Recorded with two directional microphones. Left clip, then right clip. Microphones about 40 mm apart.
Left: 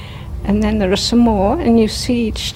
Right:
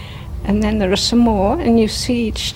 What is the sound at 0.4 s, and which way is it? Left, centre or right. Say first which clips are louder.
A woman's voice: left 1 dB; right.